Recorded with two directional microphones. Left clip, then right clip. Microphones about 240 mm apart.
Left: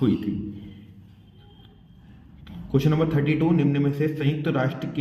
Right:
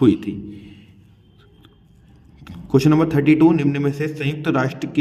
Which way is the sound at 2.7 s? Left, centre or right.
Right.